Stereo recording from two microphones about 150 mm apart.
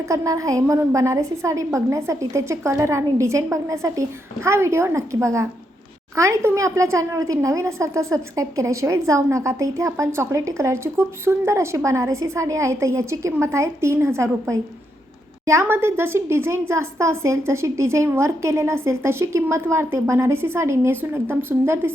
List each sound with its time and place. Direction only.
0.0 s a woman's voice: 20° right (ahead or behind)